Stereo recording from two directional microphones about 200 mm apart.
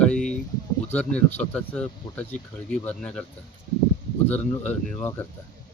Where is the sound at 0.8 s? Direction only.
5° left (ahead or behind).